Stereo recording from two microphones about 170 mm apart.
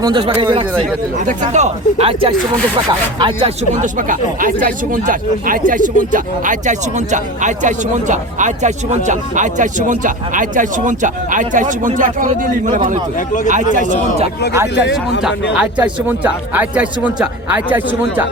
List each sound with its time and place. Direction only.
0.0 s speech: 30° right (ahead or behind)
1.2 s speech: 45° right (ahead or behind)
13.1 s a man's voice: 50° left (ahead or behind)
13.5 s speech: 50° right (ahead or behind)
14.8 s speech: 90° left
15.5 s a man's voice: 10° right (ahead or behind)